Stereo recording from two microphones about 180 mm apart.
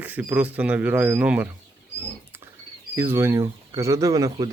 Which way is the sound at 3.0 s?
15° right (ahead or behind).